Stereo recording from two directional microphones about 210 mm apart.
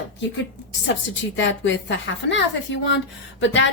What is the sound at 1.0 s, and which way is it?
Speech, 60° left (ahead or behind).